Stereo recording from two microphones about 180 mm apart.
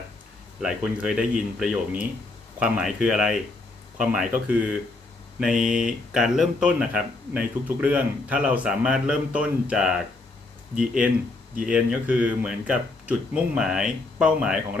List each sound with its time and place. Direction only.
0.6 s speech: 5° right (ahead or behind)